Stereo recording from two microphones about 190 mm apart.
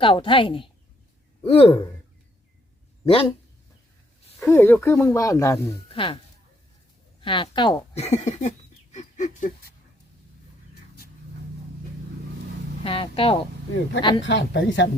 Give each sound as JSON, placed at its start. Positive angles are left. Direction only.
{"t": 0.0, "sound": "speech", "side_deg": 25}
{"t": 3.1, "sound": "speech", "side_deg": 30}
{"t": 4.4, "sound": "speech", "side_deg": 10}
{"t": 5.9, "sound": "speech", "side_deg": 25}
{"t": 7.2, "sound": "speech", "side_deg": 25}
{"t": 12.8, "sound": "speech", "side_deg": 30}
{"t": 14.3, "sound": "a woman's voice", "side_deg": 70}